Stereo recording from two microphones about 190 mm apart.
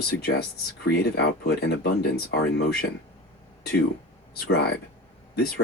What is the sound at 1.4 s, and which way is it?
Speech, 60° left (ahead or behind).